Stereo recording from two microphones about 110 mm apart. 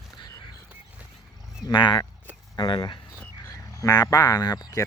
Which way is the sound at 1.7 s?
45° left (ahead or behind).